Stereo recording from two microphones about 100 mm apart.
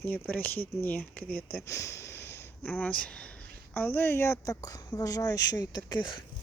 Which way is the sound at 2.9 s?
10° left (ahead or behind).